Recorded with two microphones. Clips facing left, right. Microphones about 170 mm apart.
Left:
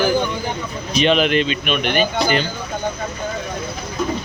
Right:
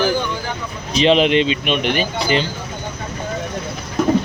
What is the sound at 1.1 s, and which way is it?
Speech, 25° right (ahead or behind).